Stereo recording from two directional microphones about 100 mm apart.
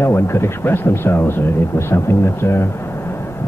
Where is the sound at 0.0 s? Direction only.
25° left (ahead or behind).